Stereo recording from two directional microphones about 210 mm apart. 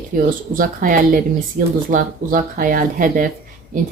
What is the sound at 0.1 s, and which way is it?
Speech, 45° right (ahead or behind).